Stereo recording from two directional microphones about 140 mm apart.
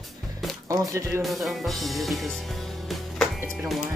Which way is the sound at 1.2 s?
Centre (ahead or behind).